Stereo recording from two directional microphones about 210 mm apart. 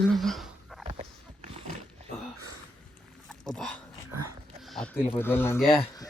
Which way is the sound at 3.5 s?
Centre (ahead or behind).